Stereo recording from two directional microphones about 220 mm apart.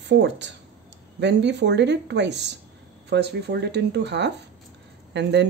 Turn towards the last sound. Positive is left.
turn(degrees=-50)  # may be behind; listen again after turning